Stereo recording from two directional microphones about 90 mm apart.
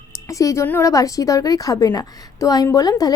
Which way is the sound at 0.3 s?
35° left (ahead or behind).